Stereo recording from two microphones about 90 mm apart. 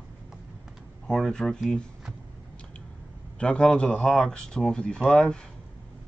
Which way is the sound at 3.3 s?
10° left (ahead or behind).